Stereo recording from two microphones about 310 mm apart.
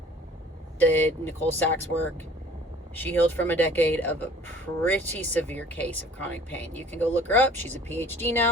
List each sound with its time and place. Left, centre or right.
0.8 s speech: centre
2.9 s speech: centre